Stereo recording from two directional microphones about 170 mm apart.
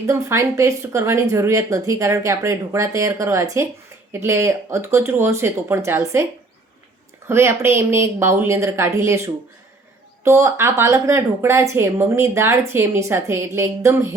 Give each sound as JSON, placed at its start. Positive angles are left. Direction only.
{"t": 0.1, "sound": "a woman's voice", "side_deg": -15}
{"t": 7.3, "sound": "a woman's voice", "side_deg": -15}